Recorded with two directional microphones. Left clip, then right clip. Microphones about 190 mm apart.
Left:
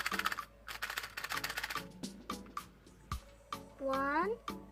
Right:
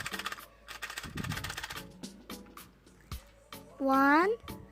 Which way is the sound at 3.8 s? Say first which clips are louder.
Right 9 dB; 40° right (ahead or behind).